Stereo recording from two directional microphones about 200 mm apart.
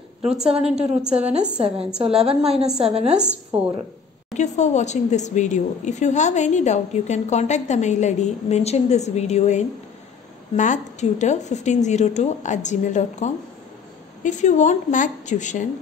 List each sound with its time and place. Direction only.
0.7 s a woman's voice: 5° right (ahead or behind)
1.2 s a woman's voice: 35° right (ahead or behind)
2.5 s a woman's voice: 5° right (ahead or behind)
2.8 s a woman's voice: 30° right (ahead or behind)
3.2 s a woman's voice: 5° right (ahead or behind)
4.4 s a woman's voice: 35° left (ahead or behind)